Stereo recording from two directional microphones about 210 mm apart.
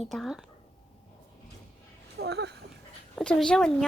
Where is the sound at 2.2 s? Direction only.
50° right (ahead or behind).